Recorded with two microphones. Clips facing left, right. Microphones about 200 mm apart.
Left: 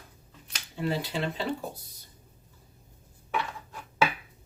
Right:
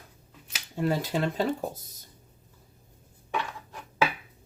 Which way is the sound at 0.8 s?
45° right (ahead or behind).